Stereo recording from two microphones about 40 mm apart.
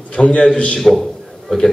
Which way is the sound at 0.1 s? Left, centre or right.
Left.